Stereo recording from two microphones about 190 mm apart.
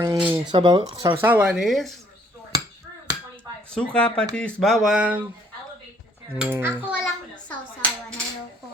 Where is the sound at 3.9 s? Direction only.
5° left (ahead or behind).